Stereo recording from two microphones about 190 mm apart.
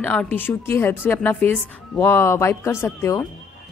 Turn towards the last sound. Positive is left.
turn(degrees=15)  # may be behind; listen again after turning